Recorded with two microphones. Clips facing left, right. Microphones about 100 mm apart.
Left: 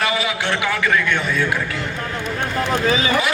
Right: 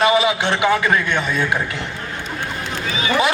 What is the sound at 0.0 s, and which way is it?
A man's voice, 20° right (ahead or behind).